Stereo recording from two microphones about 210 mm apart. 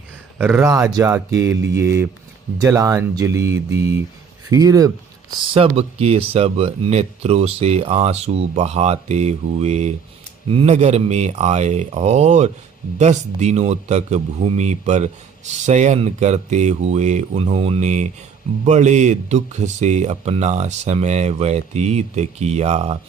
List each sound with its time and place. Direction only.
0.3 s a man's voice: 10° right (ahead or behind); by 23.0 s 30° right (ahead or behind)